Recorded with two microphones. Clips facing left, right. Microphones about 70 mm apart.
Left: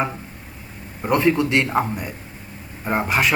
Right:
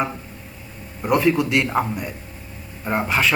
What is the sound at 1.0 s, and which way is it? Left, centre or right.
A man's voice, centre.